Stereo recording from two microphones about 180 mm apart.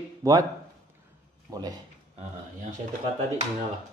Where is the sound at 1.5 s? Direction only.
20° right (ahead or behind).